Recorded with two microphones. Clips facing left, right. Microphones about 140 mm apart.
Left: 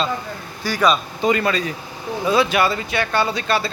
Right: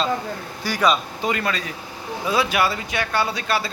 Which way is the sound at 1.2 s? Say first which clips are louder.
Left 6 dB; centre (ahead or behind).